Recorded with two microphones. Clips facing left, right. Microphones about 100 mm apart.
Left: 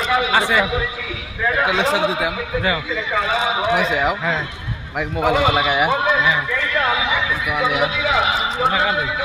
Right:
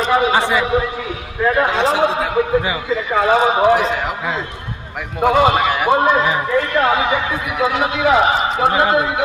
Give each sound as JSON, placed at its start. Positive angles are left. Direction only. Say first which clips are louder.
{"t": 0.0, "sound": "a man's voice", "louder": "right 4 dB", "side_deg": -35}
{"t": 0.3, "sound": "a man's voice", "louder": "right 1 dB", "side_deg": -20}
{"t": 1.5, "sound": "a man's voice", "louder": "right 1 dB", "side_deg": -40}
{"t": 3.2, "sound": "a man's voice", "louder": "right 7 dB", "side_deg": -45}
{"t": 5.4, "sound": "a man's voice", "louder": "right 6 dB", "side_deg": -45}
{"t": 5.6, "sound": "speech", "louder": "right 1 dB", "side_deg": 10}
{"t": 5.9, "sound": "a man's voice", "louder": "right 4 dB", "side_deg": -40}